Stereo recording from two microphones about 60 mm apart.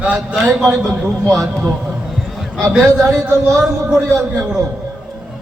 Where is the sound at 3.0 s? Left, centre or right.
Right.